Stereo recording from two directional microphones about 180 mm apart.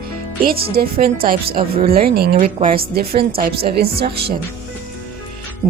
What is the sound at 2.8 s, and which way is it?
Speech, 60° right (ahead or behind).